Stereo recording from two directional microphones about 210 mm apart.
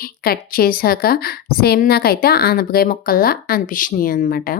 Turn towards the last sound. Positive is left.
turn(degrees=45)  # may be behind; listen again after turning